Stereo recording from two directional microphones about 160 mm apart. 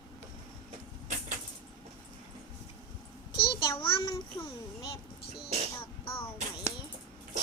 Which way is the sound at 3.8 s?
30° left (ahead or behind).